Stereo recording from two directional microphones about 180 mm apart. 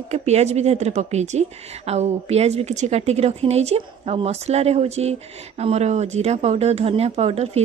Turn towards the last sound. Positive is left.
turn(degrees=-35)  # may be behind; listen again after turning